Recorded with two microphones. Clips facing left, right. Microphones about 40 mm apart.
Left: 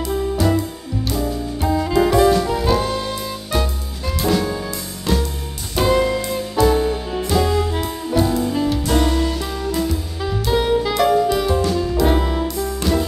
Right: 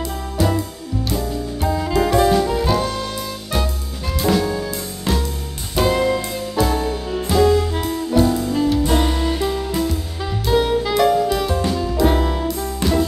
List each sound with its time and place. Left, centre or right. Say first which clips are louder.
0.1 s music: left 4 dB; centre
4.2 s jazz: right 1 dB; centre
5.8 s music: even; centre
9.0 s music: even; centre
9.8 s music: even; centre